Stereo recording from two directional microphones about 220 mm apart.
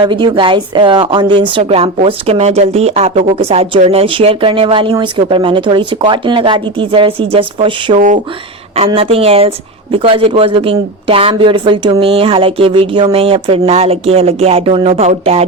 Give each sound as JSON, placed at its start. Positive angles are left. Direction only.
{"t": 0.0, "sound": "a woman's voice", "side_deg": -20}